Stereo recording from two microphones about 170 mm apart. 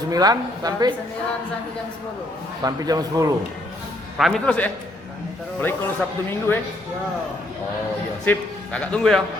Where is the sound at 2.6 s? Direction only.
20° right (ahead or behind).